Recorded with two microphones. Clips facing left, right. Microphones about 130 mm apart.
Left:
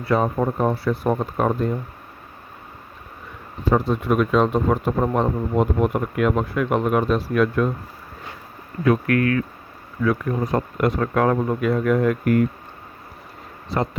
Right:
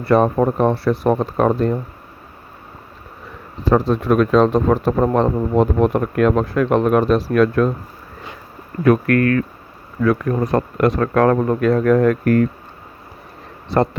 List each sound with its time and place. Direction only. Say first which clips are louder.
0.0 s speech: right 6 dB; 70° right (ahead or behind)
3.6 s speech: right 4 dB; 90° right
8.8 s speech: right 4 dB; 60° right (ahead or behind); by 11.8 s 85° right
11.8 s speech: right 5 dB; 55° right (ahead or behind)
12.2 s speech: right 3 dB; 10° left (ahead or behind)